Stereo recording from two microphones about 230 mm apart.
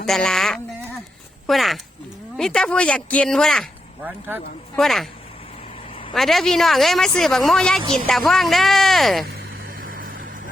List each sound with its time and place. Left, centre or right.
0.0 s a man's voice: centre
6.1 s a man's voice: centre
9.2 s vehicle: right